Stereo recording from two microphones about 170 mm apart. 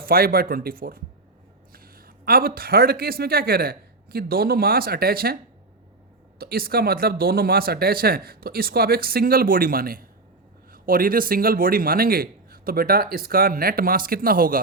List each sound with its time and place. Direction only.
0.0 s a man's voice: 60° right (ahead or behind)
6.4 s a man's voice: 60° right (ahead or behind)